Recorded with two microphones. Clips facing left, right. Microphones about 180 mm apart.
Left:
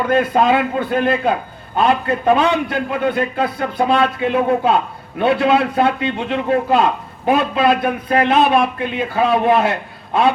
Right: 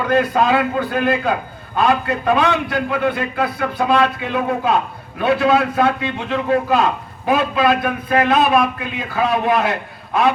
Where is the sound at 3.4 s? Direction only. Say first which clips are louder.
Left 1 dB; 25° left (ahead or behind).